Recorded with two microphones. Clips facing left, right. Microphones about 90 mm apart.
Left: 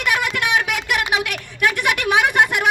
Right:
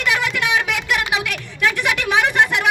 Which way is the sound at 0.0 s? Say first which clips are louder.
Even; 15° left (ahead or behind).